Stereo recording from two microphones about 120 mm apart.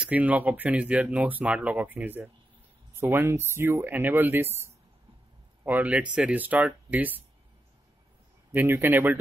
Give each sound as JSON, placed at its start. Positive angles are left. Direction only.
{"t": 0.0, "sound": "speech", "side_deg": -10}
{"t": 8.5, "sound": "speech", "side_deg": -20}